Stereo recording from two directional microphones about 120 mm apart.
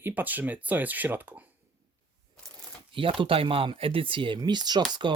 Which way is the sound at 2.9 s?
45° right (ahead or behind).